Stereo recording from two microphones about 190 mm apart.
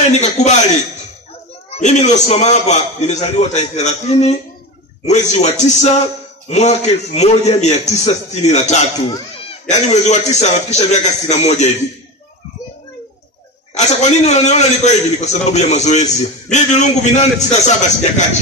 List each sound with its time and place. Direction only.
0.1 s a man's voice: 40° left (ahead or behind)
1.7 s a man's voice: 35° left (ahead or behind)
13.7 s a man's voice: 35° left (ahead or behind)